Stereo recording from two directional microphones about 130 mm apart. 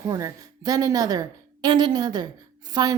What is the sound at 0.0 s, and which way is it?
A woman's voice, 25° right (ahead or behind).